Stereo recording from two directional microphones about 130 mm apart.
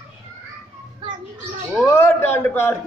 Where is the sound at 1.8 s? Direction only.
15° left (ahead or behind).